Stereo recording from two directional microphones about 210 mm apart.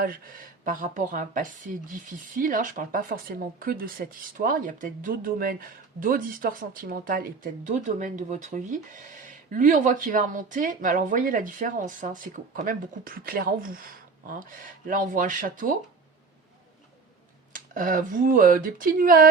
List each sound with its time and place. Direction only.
0.0 s speech: 45° right (ahead or behind)
17.5 s speech: 40° right (ahead or behind)